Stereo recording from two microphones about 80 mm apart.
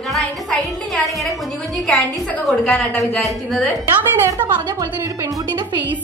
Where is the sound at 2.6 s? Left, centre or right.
Centre.